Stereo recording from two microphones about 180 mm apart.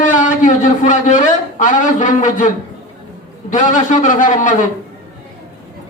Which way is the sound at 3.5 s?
45° left (ahead or behind).